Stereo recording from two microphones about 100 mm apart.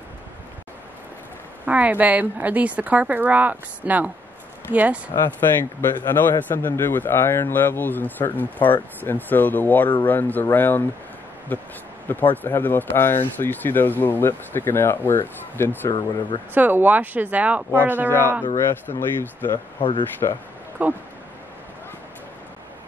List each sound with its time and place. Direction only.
1.7 s a woman's voice: 15° right (ahead or behind)
5.1 s a man's voice: 25° left (ahead or behind)
15.9 s speech: 50° left (ahead or behind)
16.5 s a woman's voice: 15° right (ahead or behind)
18.4 s a man's voice: 20° left (ahead or behind)
19.8 s speech: 60° left (ahead or behind)
20.8 s speech: 20° right (ahead or behind)